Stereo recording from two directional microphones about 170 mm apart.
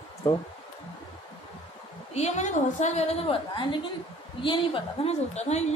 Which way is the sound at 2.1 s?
40° left (ahead or behind).